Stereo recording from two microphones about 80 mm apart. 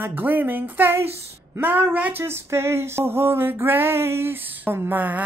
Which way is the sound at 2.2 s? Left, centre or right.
Right.